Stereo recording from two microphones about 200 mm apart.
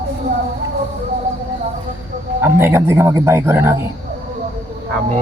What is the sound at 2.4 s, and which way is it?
A man's voice, 10° right (ahead or behind).